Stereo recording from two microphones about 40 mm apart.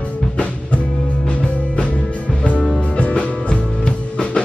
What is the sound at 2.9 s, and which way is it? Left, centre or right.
Music, left.